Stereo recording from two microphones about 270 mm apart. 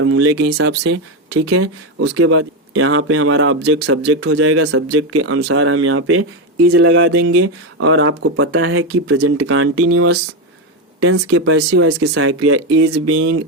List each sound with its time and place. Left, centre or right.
0.0 s speech: right
1.5 s speech: right
5.4 s speech: right
11.3 s speech: right